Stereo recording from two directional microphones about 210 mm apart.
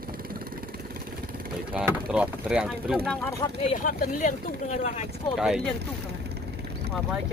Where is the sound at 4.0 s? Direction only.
35° left (ahead or behind).